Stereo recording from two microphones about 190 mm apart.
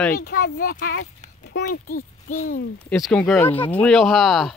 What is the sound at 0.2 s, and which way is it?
Speech, 55° left (ahead or behind).